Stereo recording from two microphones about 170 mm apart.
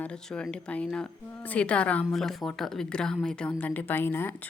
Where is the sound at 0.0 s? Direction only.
5° left (ahead or behind).